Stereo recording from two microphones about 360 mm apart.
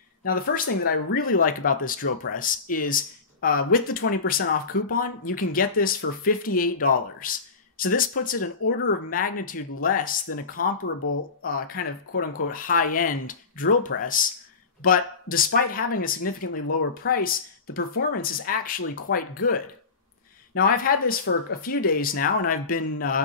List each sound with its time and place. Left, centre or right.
0.8 s speech: left